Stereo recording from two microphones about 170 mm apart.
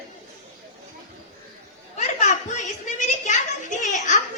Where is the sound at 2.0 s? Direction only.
45° left (ahead or behind).